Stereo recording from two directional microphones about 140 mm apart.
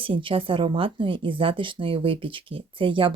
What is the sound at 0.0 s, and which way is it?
Speech, 40° right (ahead or behind).